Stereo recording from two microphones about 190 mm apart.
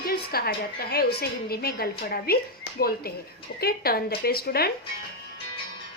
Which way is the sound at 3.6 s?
55° left (ahead or behind).